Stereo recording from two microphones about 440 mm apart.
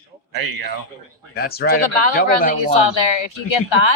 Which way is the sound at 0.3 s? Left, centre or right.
Right.